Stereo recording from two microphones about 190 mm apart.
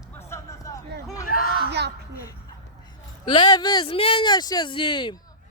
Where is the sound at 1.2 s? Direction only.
50° left (ahead or behind).